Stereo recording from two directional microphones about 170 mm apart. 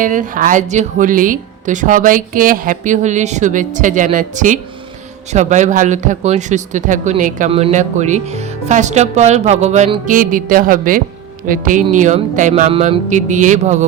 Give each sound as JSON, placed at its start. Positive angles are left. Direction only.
{"t": 0.0, "sound": "speech", "side_deg": -50}